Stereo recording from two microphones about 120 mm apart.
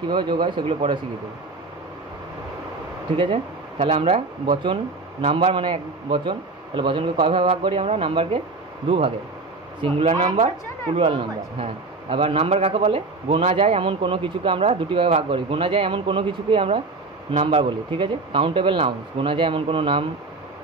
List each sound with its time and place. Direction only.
0.1 s speech: 40° right (ahead or behind)
3.2 s speech: 45° right (ahead or behind)
11.6 s speech: 50° right (ahead or behind)